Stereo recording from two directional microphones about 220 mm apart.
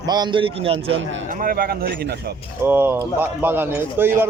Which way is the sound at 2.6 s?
10° right (ahead or behind).